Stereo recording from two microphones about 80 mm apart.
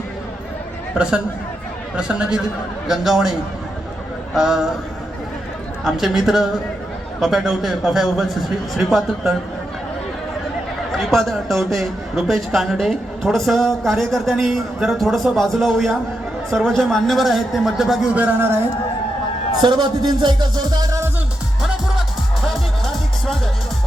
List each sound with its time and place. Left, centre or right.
2.0 s a man's voice: centre
4.4 s speech: centre
5.8 s a man's voice: centre
10.9 s a man's voice: centre
18.1 s speech: centre
19.6 s music: right
22.5 s music: centre